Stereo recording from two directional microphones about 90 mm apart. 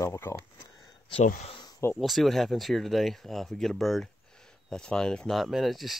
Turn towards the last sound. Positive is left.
turn(degrees=0)  # may be behind; listen again after turning